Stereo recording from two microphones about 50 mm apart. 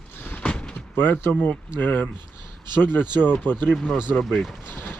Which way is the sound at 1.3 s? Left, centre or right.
Left.